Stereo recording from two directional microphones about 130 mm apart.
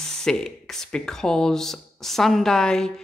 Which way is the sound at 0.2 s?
5° left (ahead or behind).